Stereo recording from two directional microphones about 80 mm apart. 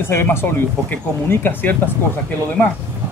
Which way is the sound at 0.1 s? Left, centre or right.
Left.